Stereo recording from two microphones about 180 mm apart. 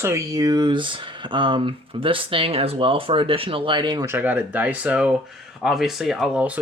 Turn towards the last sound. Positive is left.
turn(degrees=-5)  # may be behind; listen again after turning